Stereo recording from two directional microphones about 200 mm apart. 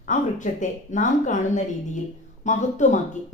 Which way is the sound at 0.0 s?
40° left (ahead or behind).